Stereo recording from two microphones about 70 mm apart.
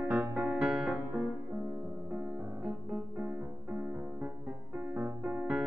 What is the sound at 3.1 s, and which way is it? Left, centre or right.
Music, right.